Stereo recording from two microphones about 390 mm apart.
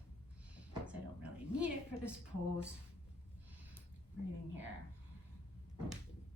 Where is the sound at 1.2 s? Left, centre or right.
Centre.